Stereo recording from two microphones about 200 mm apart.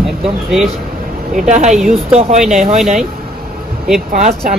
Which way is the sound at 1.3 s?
35° right (ahead or behind).